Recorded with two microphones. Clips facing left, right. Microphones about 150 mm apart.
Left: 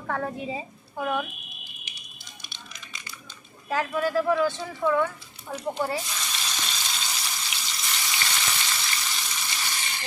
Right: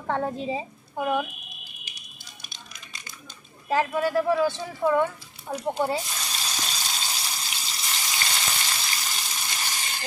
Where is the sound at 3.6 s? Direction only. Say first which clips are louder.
Right 2 dB; 15° right (ahead or behind).